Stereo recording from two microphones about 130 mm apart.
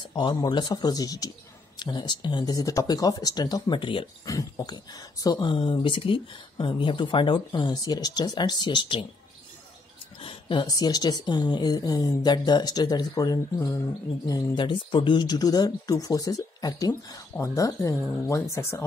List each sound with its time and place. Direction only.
0.1 s speech: 35° left (ahead or behind)
4.3 s speech: 25° left (ahead or behind)
10.2 s speech: 40° left (ahead or behind); by 18.9 s 20° left (ahead or behind)